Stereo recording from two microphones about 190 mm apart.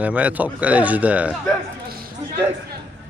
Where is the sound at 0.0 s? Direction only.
5° right (ahead or behind).